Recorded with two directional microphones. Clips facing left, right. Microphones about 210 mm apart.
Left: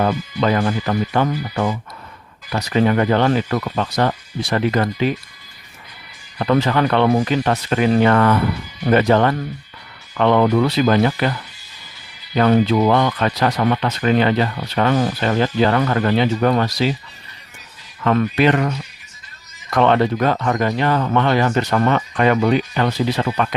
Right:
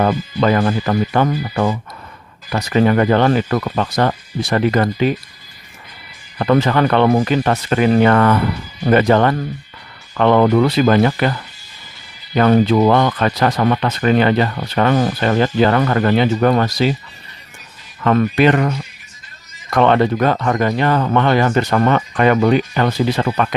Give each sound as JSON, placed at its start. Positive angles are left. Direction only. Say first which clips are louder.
{"t": 0.0, "sound": "speech", "louder": "right 3 dB", "side_deg": -50}
{"t": 6.4, "sound": "speech", "louder": "right 2 dB", "side_deg": -55}
{"t": 18.0, "sound": "speech", "louder": "right 2 dB", "side_deg": -50}
{"t": 19.7, "sound": "speech", "louder": "right 2 dB", "side_deg": -55}